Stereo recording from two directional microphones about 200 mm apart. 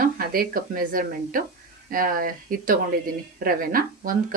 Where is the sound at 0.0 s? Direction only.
45° right (ahead or behind).